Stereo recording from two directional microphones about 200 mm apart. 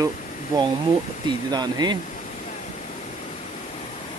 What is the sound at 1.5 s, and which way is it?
Speech, 20° right (ahead or behind).